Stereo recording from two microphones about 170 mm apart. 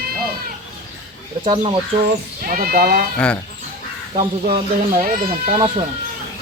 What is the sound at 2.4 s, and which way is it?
Speech, 60° right (ahead or behind).